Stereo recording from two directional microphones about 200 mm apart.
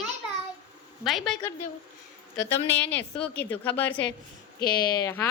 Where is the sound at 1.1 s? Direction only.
Centre (ahead or behind).